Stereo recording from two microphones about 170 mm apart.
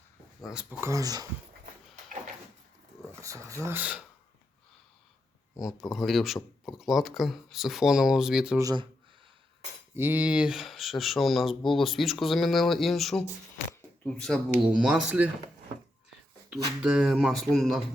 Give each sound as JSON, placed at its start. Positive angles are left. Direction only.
{"t": 0.8, "sound": "speech", "side_deg": -20}
{"t": 3.2, "sound": "speech", "side_deg": -20}
{"t": 5.8, "sound": "speech", "side_deg": 0}
{"t": 8.5, "sound": "speech", "side_deg": -25}
{"t": 9.9, "sound": "speech", "side_deg": -10}
{"t": 16.5, "sound": "speech", "side_deg": -5}